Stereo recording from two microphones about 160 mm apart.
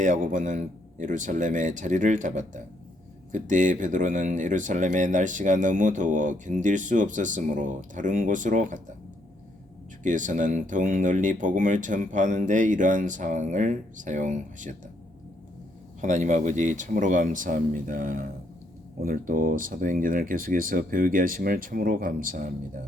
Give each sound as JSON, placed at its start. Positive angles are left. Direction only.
{"t": 0.0, "sound": "speech", "side_deg": -55}
{"t": 10.0, "sound": "speech", "side_deg": -50}
{"t": 16.0, "sound": "speech", "side_deg": -50}